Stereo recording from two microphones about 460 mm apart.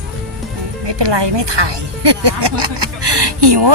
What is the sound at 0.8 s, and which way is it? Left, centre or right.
Speech, right.